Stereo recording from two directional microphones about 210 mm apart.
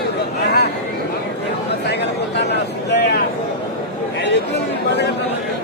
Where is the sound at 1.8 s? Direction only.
50° left (ahead or behind).